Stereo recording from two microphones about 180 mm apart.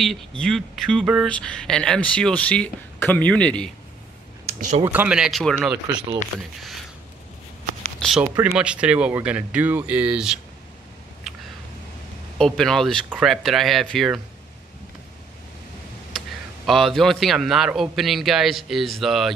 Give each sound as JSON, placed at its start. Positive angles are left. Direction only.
{"t": 0.0, "sound": "a man's voice", "side_deg": 5}
{"t": 4.5, "sound": "a sound", "side_deg": -40}
{"t": 4.8, "sound": "a man's voice", "side_deg": -10}
{"t": 8.0, "sound": "a man's voice", "side_deg": 5}
{"t": 8.5, "sound": "speech", "side_deg": -5}
{"t": 12.4, "sound": "a man's voice", "side_deg": 5}
{"t": 16.6, "sound": "a man's voice", "side_deg": 0}